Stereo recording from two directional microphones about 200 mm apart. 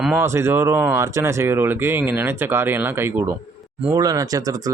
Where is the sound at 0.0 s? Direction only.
10° right (ahead or behind).